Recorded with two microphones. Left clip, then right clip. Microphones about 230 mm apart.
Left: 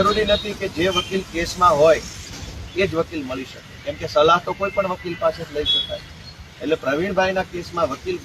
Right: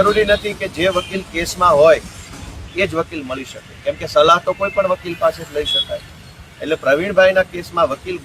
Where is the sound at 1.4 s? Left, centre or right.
Centre.